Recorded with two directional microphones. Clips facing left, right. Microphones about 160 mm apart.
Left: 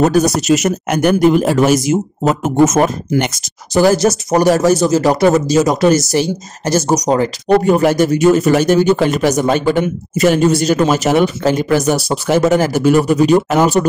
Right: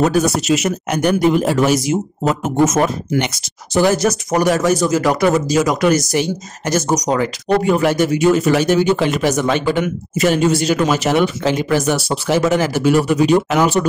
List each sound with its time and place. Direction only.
0.0 s speech: 40° left (ahead or behind)
7.4 s speech: 45° left (ahead or behind)